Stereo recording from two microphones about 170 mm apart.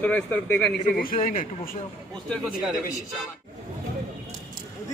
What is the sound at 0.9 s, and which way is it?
Speech, 60° left (ahead or behind).